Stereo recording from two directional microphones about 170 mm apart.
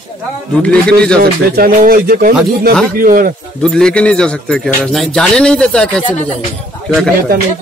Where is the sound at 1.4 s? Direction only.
60° right (ahead or behind).